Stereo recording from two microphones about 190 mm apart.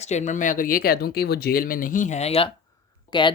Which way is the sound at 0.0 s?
35° left (ahead or behind).